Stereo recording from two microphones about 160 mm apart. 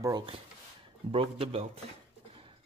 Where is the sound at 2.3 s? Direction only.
35° right (ahead or behind).